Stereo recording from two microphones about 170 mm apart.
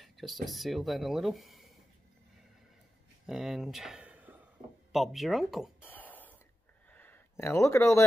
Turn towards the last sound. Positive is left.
turn(degrees=15)  # may be behind; listen again after turning